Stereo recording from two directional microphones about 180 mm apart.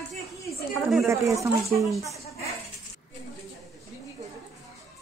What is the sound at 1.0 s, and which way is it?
Speech, 15° right (ahead or behind).